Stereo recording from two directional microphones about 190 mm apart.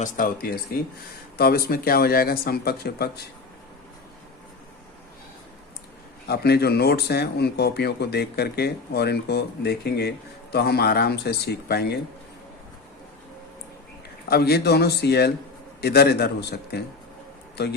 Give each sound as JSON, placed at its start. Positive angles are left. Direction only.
{"t": 0.0, "sound": "speech", "side_deg": 45}
{"t": 6.2, "sound": "speech", "side_deg": 55}
{"t": 14.3, "sound": "speech", "side_deg": 55}